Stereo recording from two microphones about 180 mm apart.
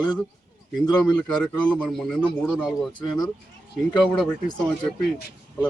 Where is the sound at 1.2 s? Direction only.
5° left (ahead or behind).